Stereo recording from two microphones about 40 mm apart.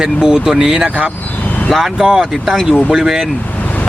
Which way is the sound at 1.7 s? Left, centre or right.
Centre.